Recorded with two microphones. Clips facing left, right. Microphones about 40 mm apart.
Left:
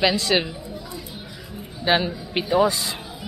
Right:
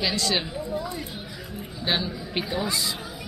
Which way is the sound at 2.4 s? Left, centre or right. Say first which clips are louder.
Left 3 dB; centre.